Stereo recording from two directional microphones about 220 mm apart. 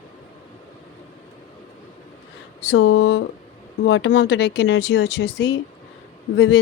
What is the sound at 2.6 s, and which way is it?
Speech, 60° left (ahead or behind).